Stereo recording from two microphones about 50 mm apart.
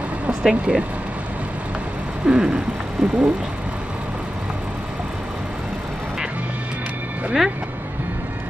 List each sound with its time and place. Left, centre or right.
0.3 s bird: centre
2.2 s bird: centre